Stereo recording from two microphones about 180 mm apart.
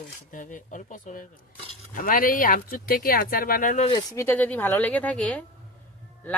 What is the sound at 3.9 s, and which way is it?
Speech, 20° left (ahead or behind).